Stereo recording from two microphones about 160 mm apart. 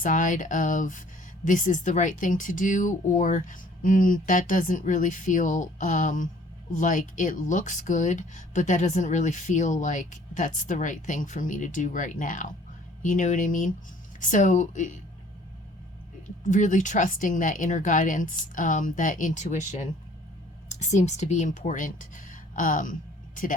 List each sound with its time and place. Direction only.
0.0 s speech: 55° left (ahead or behind)
16.4 s speech: 55° left (ahead or behind)